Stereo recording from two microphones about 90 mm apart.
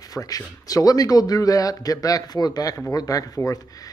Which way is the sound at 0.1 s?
40° left (ahead or behind).